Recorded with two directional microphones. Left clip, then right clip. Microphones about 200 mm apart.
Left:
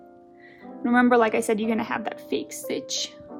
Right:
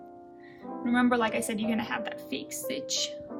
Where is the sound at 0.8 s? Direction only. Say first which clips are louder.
Left 7 dB; 40° left (ahead or behind).